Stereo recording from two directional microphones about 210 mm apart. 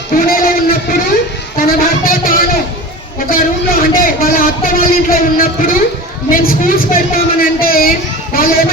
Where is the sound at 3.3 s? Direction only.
40° left (ahead or behind).